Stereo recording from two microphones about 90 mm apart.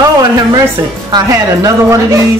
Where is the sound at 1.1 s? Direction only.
40° right (ahead or behind).